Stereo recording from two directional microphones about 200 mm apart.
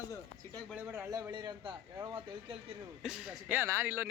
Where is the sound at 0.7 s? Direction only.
10° right (ahead or behind).